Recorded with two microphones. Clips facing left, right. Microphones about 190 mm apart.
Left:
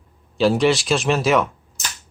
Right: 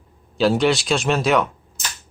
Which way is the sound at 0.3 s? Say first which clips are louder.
Left 1 dB; centre (ahead or behind).